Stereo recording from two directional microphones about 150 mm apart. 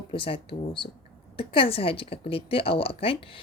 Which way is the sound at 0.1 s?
35° left (ahead or behind).